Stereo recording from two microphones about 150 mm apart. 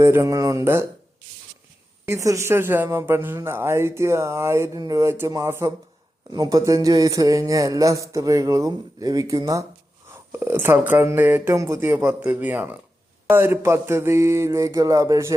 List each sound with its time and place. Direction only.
0.0 s speech: 20° right (ahead or behind)
2.0 s speech: 20° right (ahead or behind)